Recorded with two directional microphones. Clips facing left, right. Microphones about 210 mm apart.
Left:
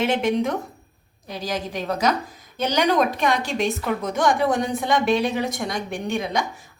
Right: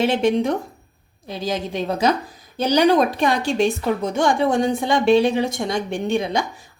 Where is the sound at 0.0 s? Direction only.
30° right (ahead or behind).